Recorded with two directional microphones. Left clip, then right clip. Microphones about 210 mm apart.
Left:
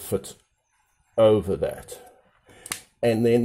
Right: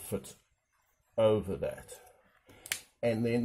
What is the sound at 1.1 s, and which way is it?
Speech, 35° left (ahead or behind).